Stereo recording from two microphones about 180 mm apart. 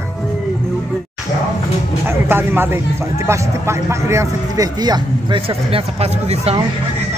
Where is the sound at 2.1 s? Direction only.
10° right (ahead or behind).